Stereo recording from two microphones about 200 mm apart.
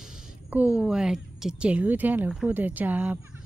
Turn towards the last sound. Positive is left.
turn(degrees=-10)  # may be behind; listen again after turning